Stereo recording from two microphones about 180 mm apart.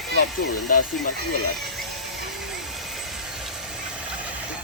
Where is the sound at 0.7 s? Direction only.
50° left (ahead or behind).